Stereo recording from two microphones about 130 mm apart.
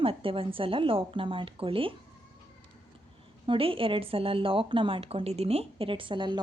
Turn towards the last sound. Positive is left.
turn(degrees=-35)  # may be behind; listen again after turning